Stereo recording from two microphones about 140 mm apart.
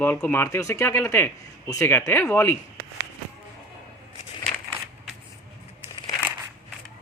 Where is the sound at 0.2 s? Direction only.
15° left (ahead or behind).